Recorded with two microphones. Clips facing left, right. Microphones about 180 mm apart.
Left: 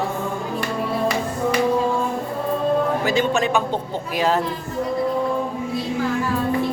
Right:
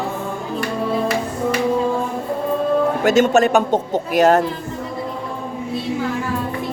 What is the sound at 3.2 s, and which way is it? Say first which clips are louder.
Speech: right 8 dB; 45° right (ahead or behind).